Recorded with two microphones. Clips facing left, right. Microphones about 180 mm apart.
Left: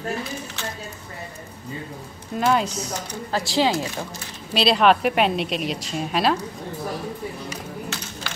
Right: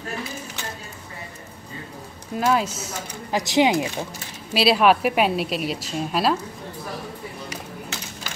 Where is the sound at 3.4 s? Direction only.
20° right (ahead or behind).